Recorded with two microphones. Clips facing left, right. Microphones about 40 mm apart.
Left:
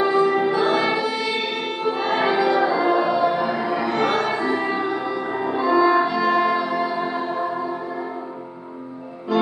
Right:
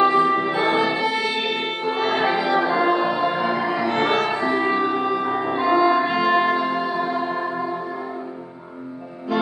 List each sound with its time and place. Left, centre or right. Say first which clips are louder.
0.0 s music: right 1 dB; right
1.9 s music: even; right
2.5 s music: even; right